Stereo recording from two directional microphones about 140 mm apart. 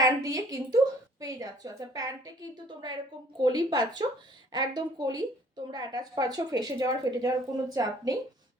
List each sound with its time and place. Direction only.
0.0 s speech: 25° right (ahead or behind)